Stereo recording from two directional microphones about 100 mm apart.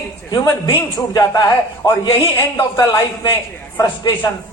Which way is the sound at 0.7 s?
55° left (ahead or behind).